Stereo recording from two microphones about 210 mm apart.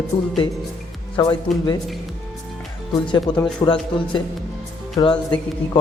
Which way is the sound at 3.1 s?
20° left (ahead or behind).